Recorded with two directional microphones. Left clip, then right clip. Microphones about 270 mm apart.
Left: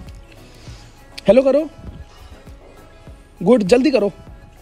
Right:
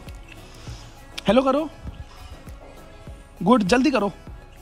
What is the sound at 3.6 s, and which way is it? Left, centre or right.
Speech, centre.